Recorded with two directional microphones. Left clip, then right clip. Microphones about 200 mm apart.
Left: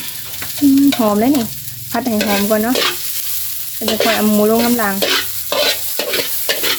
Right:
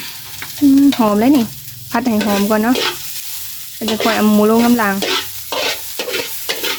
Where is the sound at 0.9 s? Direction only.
25° right (ahead or behind).